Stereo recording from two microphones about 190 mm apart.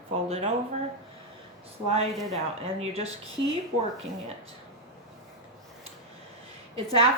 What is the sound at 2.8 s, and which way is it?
Speech, 35° right (ahead or behind).